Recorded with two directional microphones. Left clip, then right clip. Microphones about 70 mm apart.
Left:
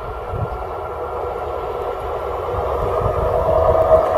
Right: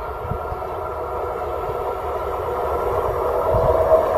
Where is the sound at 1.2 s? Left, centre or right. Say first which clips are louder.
Left 1 dB; centre.